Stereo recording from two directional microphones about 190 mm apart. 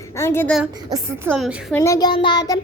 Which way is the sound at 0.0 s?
15° left (ahead or behind).